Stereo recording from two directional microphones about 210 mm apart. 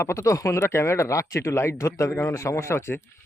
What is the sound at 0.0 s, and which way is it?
Speech, 15° left (ahead or behind).